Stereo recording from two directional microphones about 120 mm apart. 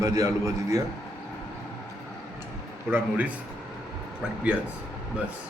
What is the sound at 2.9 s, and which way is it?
Speech, 15° right (ahead or behind).